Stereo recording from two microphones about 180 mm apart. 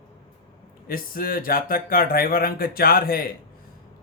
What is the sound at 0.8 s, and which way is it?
Speech, 55° left (ahead or behind).